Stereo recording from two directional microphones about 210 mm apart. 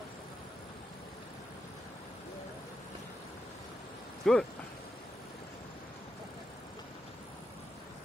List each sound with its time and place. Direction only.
4.2 s speech: centre (ahead or behind)